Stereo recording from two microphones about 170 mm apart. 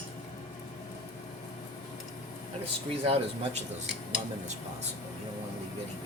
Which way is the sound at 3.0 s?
35° right (ahead or behind).